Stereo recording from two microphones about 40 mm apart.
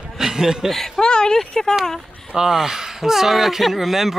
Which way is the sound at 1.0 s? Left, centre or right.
Centre.